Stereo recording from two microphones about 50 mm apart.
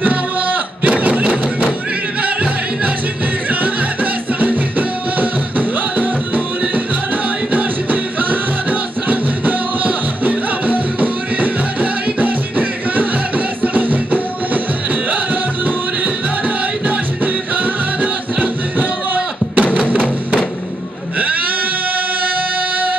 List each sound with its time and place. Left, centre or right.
0.8 s a sound: right
2.2 s music: right
7.5 s music: right
15.6 s music: right